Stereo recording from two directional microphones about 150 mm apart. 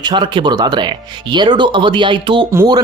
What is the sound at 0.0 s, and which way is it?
Speech, 35° right (ahead or behind).